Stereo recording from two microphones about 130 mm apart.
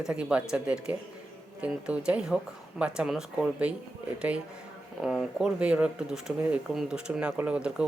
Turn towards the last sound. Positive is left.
turn(degrees=-10)  # may be behind; listen again after turning